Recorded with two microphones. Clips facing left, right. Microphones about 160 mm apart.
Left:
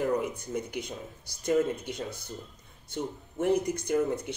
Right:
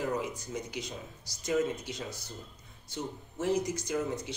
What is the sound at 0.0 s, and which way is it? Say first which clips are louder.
Speech: left 5 dB; 55° left (ahead or behind).